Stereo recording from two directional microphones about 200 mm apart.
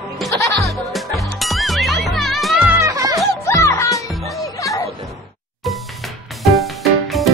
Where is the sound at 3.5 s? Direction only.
15° left (ahead or behind).